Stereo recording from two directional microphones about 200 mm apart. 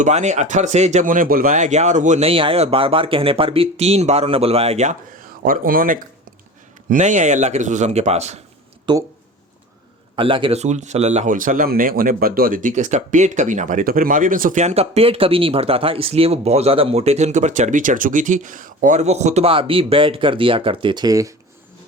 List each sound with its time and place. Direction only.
0.0 s speech: 35° right (ahead or behind)
5.5 s speech: 45° right (ahead or behind)
8.9 s speech: 20° right (ahead or behind)
10.2 s speech: 25° right (ahead or behind)